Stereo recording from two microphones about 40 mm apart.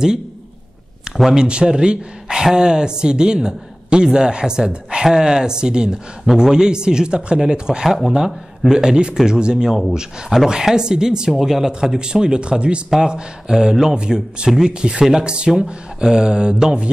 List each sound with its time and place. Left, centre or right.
1.3 s speech: right